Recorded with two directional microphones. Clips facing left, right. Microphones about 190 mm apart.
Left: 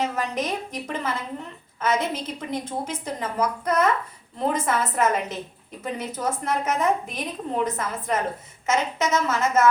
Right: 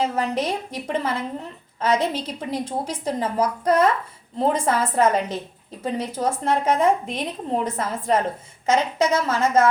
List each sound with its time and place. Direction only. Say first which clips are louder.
0.0 s a woman's voice: right 3 dB; 30° right (ahead or behind)